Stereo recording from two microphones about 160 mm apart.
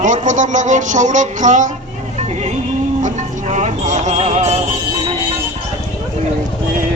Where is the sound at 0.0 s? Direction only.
50° right (ahead or behind).